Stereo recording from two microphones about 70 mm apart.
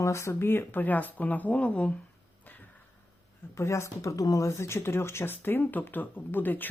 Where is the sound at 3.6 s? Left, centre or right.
Left.